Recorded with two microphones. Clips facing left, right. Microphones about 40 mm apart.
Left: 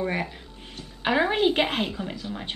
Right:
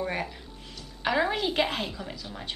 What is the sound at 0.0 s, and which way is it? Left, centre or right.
A woman's voice, centre.